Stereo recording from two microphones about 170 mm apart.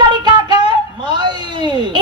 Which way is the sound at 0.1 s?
25° right (ahead or behind).